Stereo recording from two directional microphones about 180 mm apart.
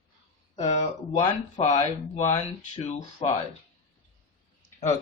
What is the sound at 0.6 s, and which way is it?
Speech, 40° left (ahead or behind).